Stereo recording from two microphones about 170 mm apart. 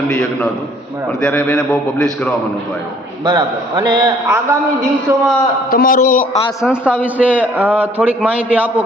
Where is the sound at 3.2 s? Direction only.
25° right (ahead or behind).